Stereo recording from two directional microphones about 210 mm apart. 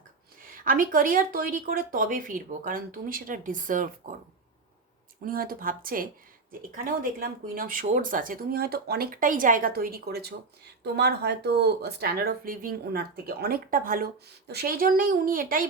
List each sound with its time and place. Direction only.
0.5 s speech: 40° right (ahead or behind)
5.2 s speech: 45° right (ahead or behind)